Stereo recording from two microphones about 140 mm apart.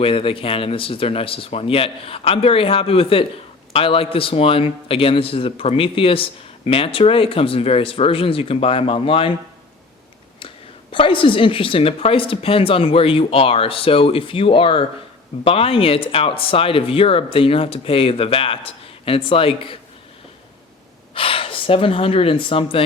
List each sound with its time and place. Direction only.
0.0 s speech: 40° left (ahead or behind)
10.9 s speech: 40° left (ahead or behind)
21.2 s speech: 40° left (ahead or behind)